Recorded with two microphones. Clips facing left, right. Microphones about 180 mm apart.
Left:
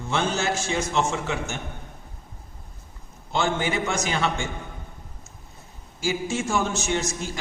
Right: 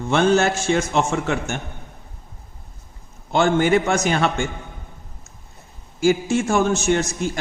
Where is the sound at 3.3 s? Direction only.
55° right (ahead or behind).